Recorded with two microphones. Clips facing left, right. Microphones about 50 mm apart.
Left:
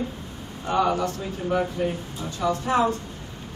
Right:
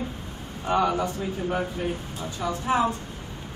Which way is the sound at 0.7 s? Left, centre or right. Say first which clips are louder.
Left 1 dB; right.